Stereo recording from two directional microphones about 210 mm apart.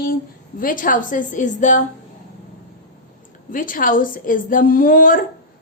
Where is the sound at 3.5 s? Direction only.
40° left (ahead or behind).